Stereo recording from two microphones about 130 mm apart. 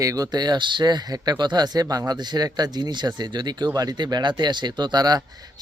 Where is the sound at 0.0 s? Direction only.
25° right (ahead or behind).